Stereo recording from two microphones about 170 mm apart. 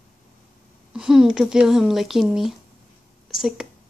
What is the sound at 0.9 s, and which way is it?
Speech, 5° right (ahead or behind).